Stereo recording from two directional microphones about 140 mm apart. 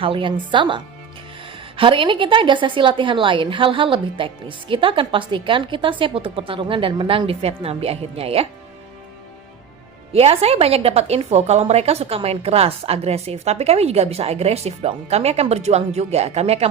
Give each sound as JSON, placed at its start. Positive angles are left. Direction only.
{"t": 0.0, "sound": "a woman's voice", "side_deg": -40}
{"t": 10.1, "sound": "a woman's voice", "side_deg": -45}